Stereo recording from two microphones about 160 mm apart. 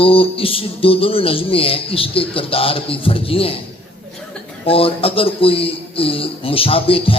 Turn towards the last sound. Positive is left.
turn(degrees=35)  # may be behind; listen again after turning